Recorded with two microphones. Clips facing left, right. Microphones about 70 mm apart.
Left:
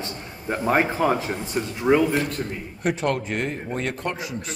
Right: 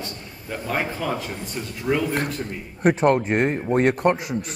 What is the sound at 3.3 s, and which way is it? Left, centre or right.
Speech, right.